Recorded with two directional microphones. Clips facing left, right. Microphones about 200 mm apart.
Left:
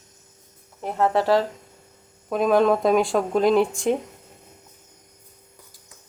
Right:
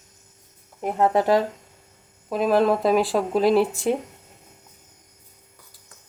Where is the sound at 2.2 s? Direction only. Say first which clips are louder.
Left 1 dB; centre (ahead or behind).